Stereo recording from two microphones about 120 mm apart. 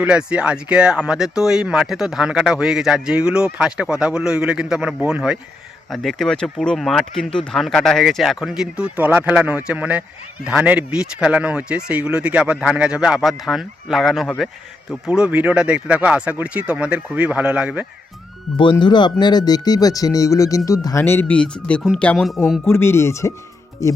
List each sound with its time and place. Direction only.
0.0 s speech: 10° right (ahead or behind)
18.5 s speech: 45° left (ahead or behind); by 22.4 s 5° left (ahead or behind)
22.6 s speech: 20° left (ahead or behind)